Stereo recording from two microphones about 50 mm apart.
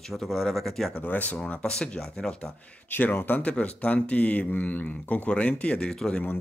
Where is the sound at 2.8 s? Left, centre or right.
Left.